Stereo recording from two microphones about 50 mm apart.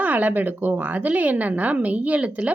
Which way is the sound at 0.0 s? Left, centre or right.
Right.